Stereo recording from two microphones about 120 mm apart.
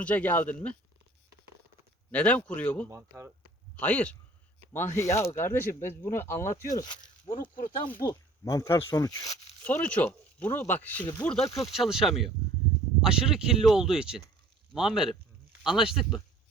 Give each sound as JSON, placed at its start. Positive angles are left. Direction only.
{"t": 0.0, "sound": "speech", "side_deg": 10}
{"t": 2.1, "sound": "speech", "side_deg": 10}
{"t": 2.9, "sound": "speech", "side_deg": -25}
{"t": 3.8, "sound": "speech", "side_deg": 15}
{"t": 9.6, "sound": "speech", "side_deg": 10}